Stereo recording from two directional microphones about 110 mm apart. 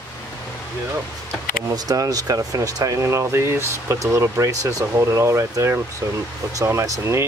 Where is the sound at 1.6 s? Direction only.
35° right (ahead or behind).